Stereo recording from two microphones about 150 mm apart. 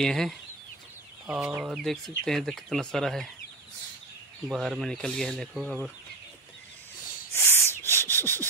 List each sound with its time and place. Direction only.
0.0 s speech: 5° left (ahead or behind)
1.2 s speech: 10° right (ahead or behind)
4.5 s speech: centre (ahead or behind)
7.3 s a sound: 15° left (ahead or behind)